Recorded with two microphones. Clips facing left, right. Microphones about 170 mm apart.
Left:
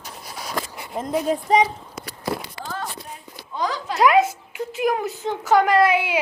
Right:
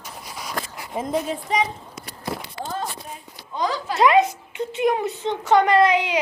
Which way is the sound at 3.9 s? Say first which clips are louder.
Even; centre (ahead or behind).